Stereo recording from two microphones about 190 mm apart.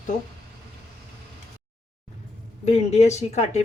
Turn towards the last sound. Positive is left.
turn(degrees=35)  # may be behind; listen again after turning